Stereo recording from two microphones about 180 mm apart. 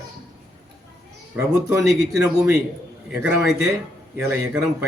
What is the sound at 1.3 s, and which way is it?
Speech, 10° right (ahead or behind).